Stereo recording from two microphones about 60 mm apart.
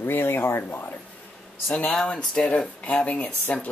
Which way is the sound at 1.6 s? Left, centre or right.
Left.